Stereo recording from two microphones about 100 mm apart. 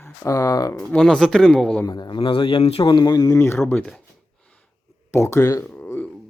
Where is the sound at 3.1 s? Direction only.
35° left (ahead or behind).